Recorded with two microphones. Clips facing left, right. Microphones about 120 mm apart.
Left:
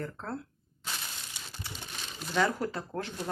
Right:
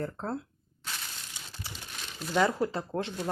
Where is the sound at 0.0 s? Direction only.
30° right (ahead or behind).